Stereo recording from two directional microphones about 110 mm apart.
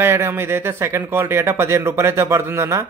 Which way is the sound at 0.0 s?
20° right (ahead or behind).